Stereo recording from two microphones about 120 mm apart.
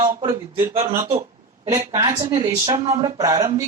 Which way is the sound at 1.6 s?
30° right (ahead or behind).